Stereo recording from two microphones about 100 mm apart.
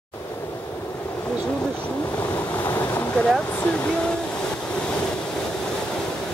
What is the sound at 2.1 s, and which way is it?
Waves, 15° left (ahead or behind).